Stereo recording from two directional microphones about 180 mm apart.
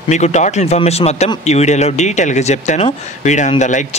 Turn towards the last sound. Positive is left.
turn(degrees=40)  # may be behind; listen again after turning